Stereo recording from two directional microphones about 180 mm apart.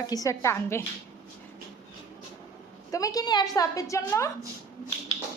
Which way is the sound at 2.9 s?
20° left (ahead or behind).